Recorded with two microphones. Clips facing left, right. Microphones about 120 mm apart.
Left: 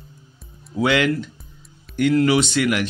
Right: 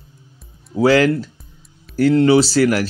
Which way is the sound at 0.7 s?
35° right (ahead or behind).